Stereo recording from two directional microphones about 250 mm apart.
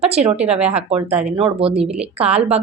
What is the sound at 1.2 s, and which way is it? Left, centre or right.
A woman's voice, right.